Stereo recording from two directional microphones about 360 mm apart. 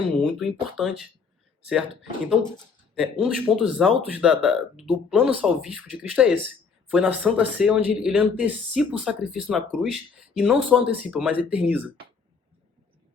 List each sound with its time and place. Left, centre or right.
0.2 s speech: centre
2.9 s speech: centre